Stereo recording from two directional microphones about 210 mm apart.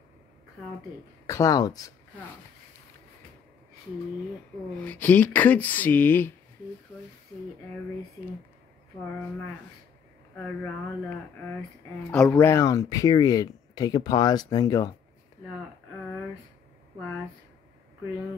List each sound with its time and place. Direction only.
1.2 s speech: 15° left (ahead or behind)
4.7 s speech: 5° left (ahead or behind)
10.3 s speech: 5° left (ahead or behind)